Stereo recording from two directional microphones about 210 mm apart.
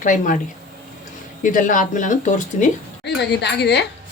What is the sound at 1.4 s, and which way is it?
Speech, 40° left (ahead or behind).